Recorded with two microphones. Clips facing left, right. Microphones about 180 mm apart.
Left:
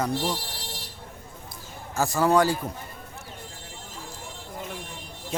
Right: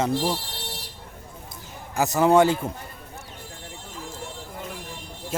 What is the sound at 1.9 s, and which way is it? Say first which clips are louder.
Speech: right 3 dB; 20° right (ahead or behind).